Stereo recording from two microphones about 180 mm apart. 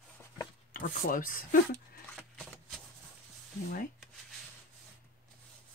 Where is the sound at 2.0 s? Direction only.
Centre (ahead or behind).